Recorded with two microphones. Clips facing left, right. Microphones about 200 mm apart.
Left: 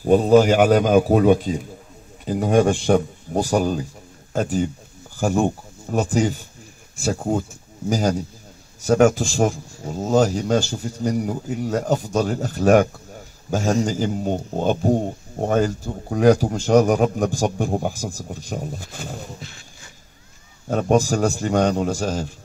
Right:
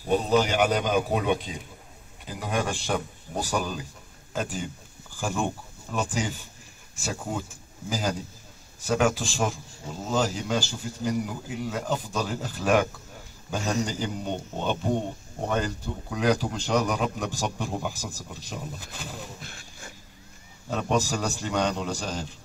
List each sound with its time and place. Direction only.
0.0 s a man's voice: 45° left (ahead or behind)
19.4 s a sound: 55° right (ahead or behind)
20.6 s a man's voice: 45° left (ahead or behind)